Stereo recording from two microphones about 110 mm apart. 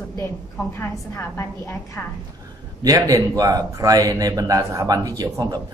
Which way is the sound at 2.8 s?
35° right (ahead or behind).